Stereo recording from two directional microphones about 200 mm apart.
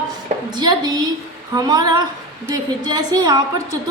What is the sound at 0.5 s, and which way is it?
A woman's voice, 20° right (ahead or behind).